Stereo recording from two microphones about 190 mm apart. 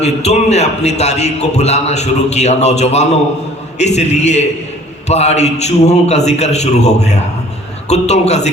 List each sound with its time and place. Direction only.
0.0 s a man's voice: 35° left (ahead or behind)